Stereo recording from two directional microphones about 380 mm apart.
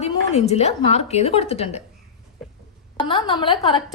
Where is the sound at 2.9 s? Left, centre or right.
Centre.